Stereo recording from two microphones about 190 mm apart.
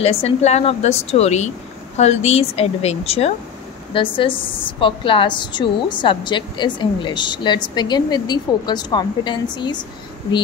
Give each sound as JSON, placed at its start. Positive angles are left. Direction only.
{"t": 0.0, "sound": "a woman's voice", "side_deg": 30}